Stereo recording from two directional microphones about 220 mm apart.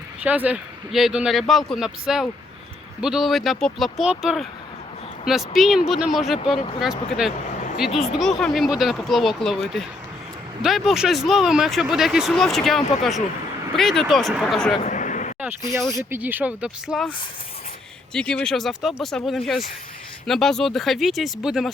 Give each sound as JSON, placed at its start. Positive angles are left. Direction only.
{"t": 0.2, "sound": "speech", "side_deg": -5}
{"t": 14.8, "sound": "a sound", "side_deg": 35}
{"t": 16.0, "sound": "speech", "side_deg": -10}
{"t": 18.1, "sound": "speech", "side_deg": 5}